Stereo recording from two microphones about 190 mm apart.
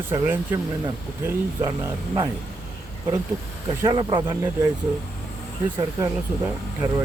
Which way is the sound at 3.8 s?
25° right (ahead or behind).